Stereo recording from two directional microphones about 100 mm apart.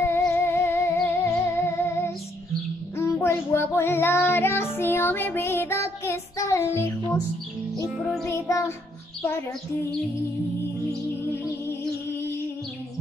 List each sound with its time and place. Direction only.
0.0 s music: 25° left (ahead or behind)
3.0 s child singing: 25° left (ahead or behind)
8.0 s music: 5° left (ahead or behind)
8.3 s child singing: 30° left (ahead or behind)